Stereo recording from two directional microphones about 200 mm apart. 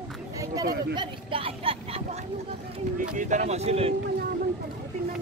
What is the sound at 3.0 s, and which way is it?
Speech, 40° right (ahead or behind).